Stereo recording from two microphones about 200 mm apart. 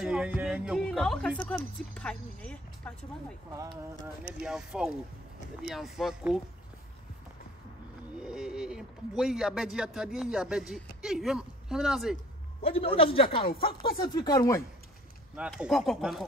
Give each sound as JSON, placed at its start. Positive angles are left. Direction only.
{"t": 0.0, "sound": "a sound", "side_deg": -5}
{"t": 1.4, "sound": "speech", "side_deg": 10}
{"t": 8.2, "sound": "speech", "side_deg": -5}
{"t": 12.6, "sound": "speech", "side_deg": 30}
{"t": 15.3, "sound": "speech", "side_deg": -5}